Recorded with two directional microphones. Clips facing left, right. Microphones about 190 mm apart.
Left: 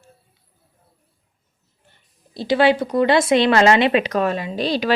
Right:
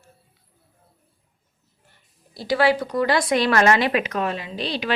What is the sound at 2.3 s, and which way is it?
Speech, 25° left (ahead or behind).